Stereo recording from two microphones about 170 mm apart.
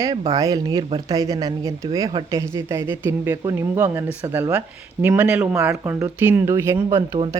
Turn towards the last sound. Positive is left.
turn(degrees=-25)  # may be behind; listen again after turning